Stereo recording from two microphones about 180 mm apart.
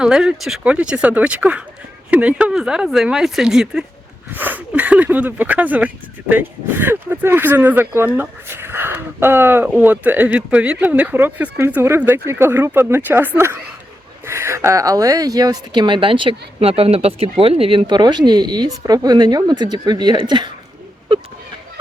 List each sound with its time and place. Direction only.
0.0 s speech: 5° right (ahead or behind); by 20.5 s 25° right (ahead or behind)